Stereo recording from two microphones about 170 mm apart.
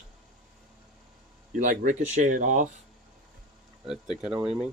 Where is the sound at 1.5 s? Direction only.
50° right (ahead or behind).